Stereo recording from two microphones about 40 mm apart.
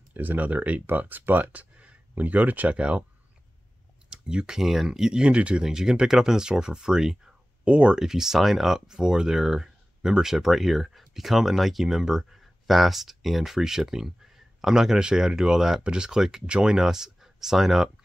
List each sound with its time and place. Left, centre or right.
0.1 s speech: right
2.7 s speech: right
4.1 s clicking: right
4.6 s speech: centre; by 5.6 s right
5.6 s speech: centre
7.6 s speech: right
8.0 s speech: centre
16.4 s speech: right
16.7 s speech: centre